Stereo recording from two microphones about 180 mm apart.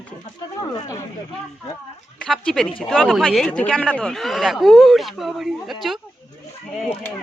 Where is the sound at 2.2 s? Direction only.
5° left (ahead or behind).